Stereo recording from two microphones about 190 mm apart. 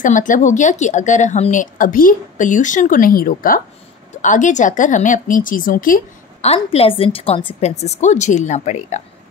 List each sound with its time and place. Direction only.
0.0 s speech: 45° left (ahead or behind)
6.4 s a woman's voice: 30° left (ahead or behind)